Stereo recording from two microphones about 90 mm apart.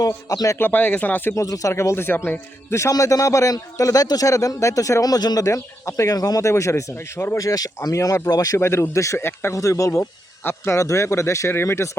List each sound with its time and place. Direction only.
0.0 s a man's voice: 40° left (ahead or behind)
0.6 s speech: 20° left (ahead or behind)
1.4 s a man's voice: 40° left (ahead or behind)
2.9 s a man's voice: 40° left (ahead or behind)
7.3 s a man's voice: 40° left (ahead or behind)
8.5 s a man's voice: 30° left (ahead or behind)